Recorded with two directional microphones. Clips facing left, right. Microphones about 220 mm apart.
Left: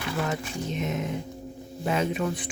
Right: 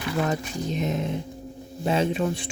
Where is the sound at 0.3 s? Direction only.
35° right (ahead or behind).